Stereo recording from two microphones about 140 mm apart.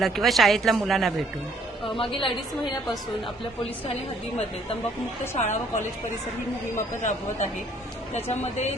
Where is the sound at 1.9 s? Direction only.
40° left (ahead or behind).